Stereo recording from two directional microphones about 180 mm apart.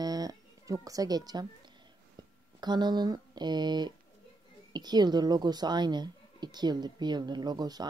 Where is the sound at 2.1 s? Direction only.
25° right (ahead or behind).